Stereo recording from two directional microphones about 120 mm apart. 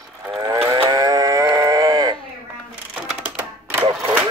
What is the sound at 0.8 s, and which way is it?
Livestock, 30° right (ahead or behind).